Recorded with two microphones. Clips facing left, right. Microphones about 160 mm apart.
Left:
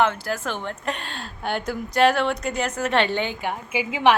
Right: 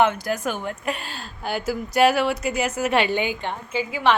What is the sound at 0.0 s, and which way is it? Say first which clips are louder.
Speech: right 2 dB; 15° right (ahead or behind).